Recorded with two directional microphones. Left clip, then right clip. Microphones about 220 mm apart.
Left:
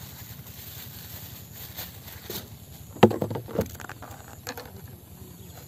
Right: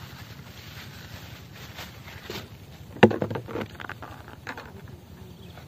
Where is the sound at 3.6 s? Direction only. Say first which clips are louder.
Left 3 dB; 40° left (ahead or behind).